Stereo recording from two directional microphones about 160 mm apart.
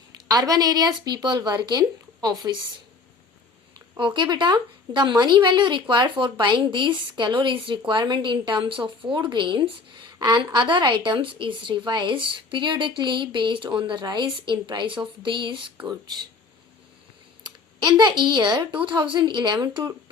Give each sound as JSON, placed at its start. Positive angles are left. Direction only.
{"t": 0.3, "sound": "a woman's voice", "side_deg": -25}
{"t": 3.8, "sound": "a woman's voice", "side_deg": -30}
{"t": 17.8, "sound": "a woman's voice", "side_deg": -30}